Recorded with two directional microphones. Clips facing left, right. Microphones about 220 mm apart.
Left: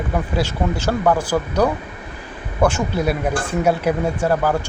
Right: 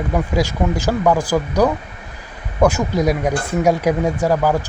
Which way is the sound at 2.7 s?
15° right (ahead or behind).